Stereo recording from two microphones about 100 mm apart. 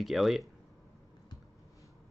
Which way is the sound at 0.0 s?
Centre (ahead or behind).